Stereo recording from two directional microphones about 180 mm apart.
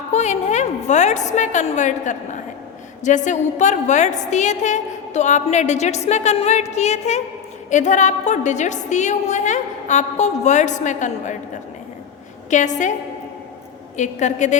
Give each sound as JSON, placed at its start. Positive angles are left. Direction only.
{"t": 0.1, "sound": "a woman's voice", "side_deg": 40}
{"t": 12.5, "sound": "a woman's voice", "side_deg": 40}
{"t": 13.9, "sound": "a woman's voice", "side_deg": 40}